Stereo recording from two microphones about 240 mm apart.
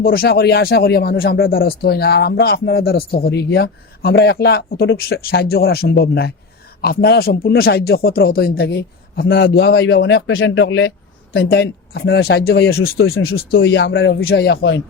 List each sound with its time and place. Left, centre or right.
0.0 s a man's voice: left
13.0 s a man's voice: left